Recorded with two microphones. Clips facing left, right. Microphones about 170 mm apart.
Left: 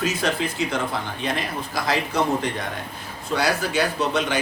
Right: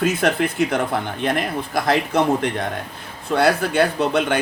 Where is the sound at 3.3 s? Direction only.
55° right (ahead or behind).